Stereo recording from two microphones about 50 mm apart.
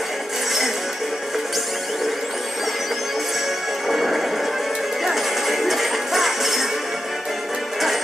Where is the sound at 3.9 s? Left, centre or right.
Centre.